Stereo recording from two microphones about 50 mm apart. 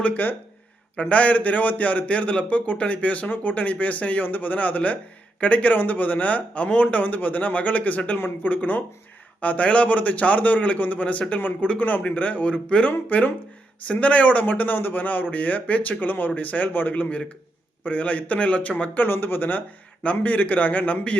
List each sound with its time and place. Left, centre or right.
0.0 s a man's voice: left
12.9 s a man's voice: left
18.9 s speech: left
20.0 s speech: left